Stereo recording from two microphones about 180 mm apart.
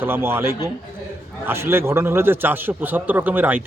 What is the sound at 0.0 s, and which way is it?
Speech, 10° right (ahead or behind).